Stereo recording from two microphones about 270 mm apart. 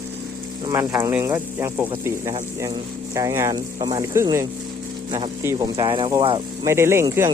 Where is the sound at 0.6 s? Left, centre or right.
Centre.